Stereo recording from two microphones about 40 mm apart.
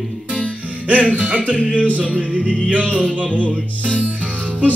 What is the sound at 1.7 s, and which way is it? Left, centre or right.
Music, left.